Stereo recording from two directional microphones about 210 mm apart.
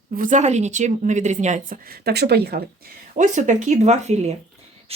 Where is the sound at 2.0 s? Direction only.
50° right (ahead or behind).